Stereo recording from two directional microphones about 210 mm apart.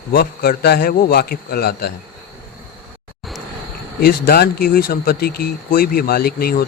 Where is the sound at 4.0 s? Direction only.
45° left (ahead or behind).